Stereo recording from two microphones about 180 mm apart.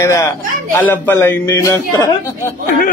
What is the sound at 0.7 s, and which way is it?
A man's voice, 10° left (ahead or behind).